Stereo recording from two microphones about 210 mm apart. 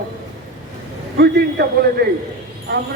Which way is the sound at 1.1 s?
50° right (ahead or behind).